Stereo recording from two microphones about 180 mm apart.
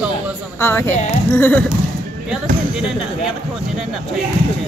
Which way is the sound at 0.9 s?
40° left (ahead or behind).